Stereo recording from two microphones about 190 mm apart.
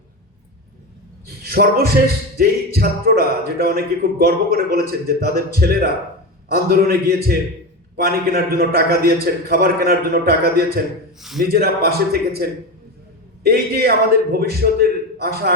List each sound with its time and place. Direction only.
1.5 s a man's voice: 55° right (ahead or behind)
11.2 s a man's voice: centre (ahead or behind)
11.5 s a man's voice: 55° right (ahead or behind)